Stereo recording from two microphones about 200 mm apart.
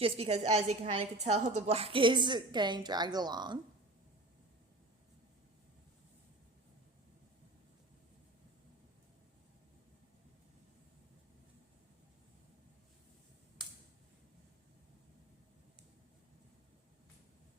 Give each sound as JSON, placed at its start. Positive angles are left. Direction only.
{"t": 0.0, "sound": "a woman's voice", "side_deg": -30}